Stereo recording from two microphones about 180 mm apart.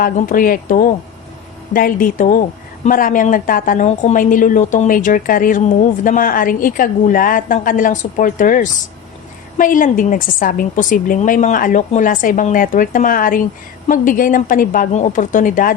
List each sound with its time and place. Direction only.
0.0 s a woman's voice: 50° left (ahead or behind)